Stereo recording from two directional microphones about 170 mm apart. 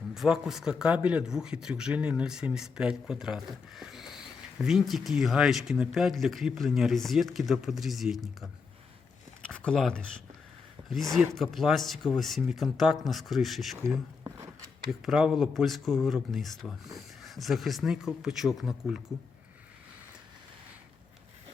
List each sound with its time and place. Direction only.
0.1 s a man's voice: centre (ahead or behind)
10.8 s a sound: 20° right (ahead or behind)
11.1 s a man's voice: centre (ahead or behind)
14.8 s a man's voice: 5° right (ahead or behind)